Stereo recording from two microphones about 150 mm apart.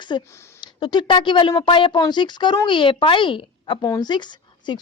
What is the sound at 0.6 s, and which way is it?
Speech, 30° left (ahead or behind).